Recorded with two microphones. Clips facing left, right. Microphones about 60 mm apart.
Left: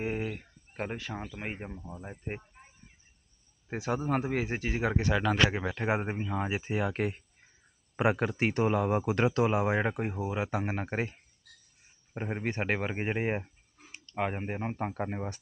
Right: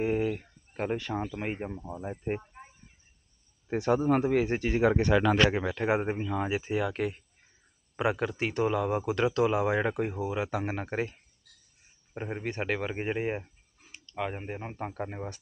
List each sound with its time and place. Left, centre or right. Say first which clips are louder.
0.0 s speech: right 5 dB; centre
3.6 s speech: right 6 dB; centre; by 9.6 s left
9.6 s speech: right 1 dB; centre
12.4 s speech: even; left